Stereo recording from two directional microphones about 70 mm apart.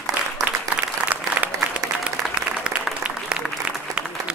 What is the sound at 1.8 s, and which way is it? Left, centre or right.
Applause, right.